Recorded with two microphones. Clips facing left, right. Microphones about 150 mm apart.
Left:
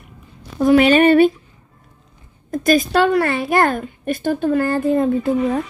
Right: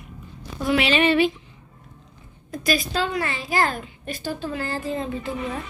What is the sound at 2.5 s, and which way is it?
Speech, 50° left (ahead or behind).